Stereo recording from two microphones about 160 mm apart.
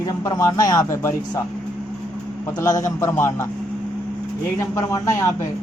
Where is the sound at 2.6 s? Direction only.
20° left (ahead or behind).